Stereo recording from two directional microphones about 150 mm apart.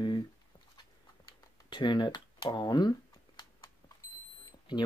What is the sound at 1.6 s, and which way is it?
Speech, 30° left (ahead or behind).